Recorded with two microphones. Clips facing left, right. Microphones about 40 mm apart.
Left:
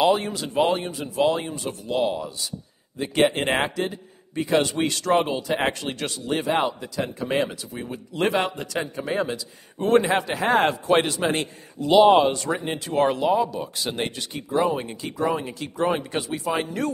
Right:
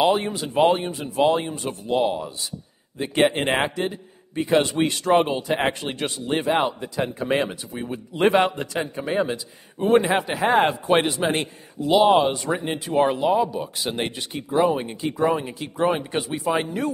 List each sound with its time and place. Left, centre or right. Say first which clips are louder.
0.2 s a man's voice: right 3 dB; right
7.0 s a man's voice: right 2 dB; right
7.4 s a man's voice: right 1 dB; centre
11.8 s a man's voice: left 1 dB; centre; by 16.7 s right